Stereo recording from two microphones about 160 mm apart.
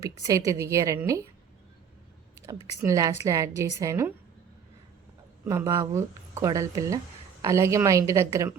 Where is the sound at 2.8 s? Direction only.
20° right (ahead or behind).